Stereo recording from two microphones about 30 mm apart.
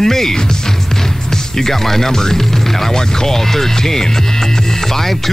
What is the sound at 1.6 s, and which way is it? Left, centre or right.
Speech, centre.